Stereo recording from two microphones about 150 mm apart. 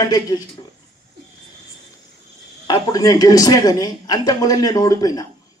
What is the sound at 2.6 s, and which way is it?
A man's voice, 25° left (ahead or behind).